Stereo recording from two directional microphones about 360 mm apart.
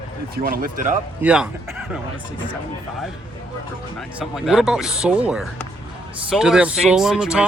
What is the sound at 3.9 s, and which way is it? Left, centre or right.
Speech, centre.